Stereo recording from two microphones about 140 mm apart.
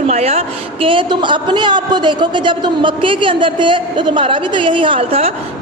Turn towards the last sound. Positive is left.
turn(degrees=-45)  # may be behind; listen again after turning